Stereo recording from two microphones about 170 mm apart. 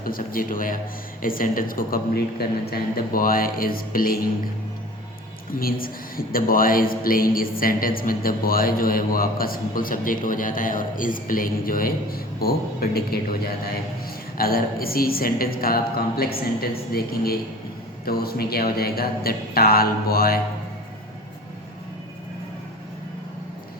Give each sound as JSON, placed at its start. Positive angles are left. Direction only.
{"t": 0.0, "sound": "a man's voice", "side_deg": 55}
{"t": 5.5, "sound": "a man's voice", "side_deg": 60}
{"t": 18.0, "sound": "a man's voice", "side_deg": 65}